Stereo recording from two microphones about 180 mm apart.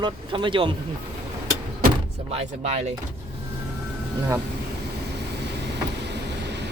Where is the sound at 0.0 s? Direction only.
25° right (ahead or behind).